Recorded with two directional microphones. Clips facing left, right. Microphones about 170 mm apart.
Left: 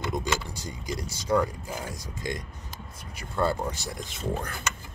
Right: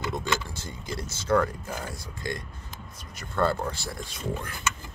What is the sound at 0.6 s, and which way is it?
Speech, 15° left (ahead or behind).